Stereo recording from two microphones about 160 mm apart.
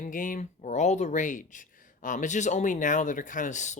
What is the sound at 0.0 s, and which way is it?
Speech, 55° left (ahead or behind).